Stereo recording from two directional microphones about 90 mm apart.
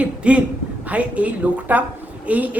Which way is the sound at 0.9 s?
15° right (ahead or behind).